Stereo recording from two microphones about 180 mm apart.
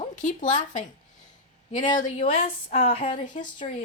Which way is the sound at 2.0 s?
40° left (ahead or behind).